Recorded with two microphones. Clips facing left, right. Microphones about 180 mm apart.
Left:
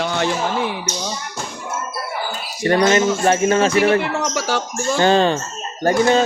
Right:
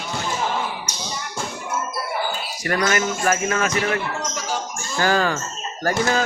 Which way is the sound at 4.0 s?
75° left (ahead or behind).